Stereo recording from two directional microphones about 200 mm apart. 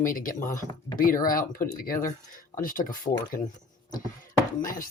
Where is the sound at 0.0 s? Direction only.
45° left (ahead or behind).